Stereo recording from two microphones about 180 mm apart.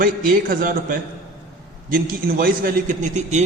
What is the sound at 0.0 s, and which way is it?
A man's voice, 50° right (ahead or behind).